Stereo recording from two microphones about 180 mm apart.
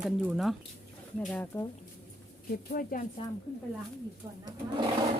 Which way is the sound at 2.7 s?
50° left (ahead or behind).